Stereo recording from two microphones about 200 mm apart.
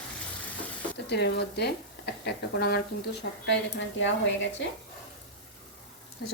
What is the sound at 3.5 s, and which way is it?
A woman's voice, 65° left (ahead or behind).